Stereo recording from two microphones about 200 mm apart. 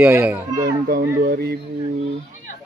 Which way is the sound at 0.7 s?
45° right (ahead or behind).